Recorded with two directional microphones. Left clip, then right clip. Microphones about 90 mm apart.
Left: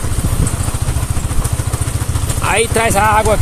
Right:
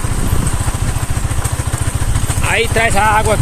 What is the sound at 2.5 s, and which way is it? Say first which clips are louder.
Speech: even; 40° left (ahead or behind).